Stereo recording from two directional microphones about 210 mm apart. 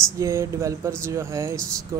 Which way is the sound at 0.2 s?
15° right (ahead or behind).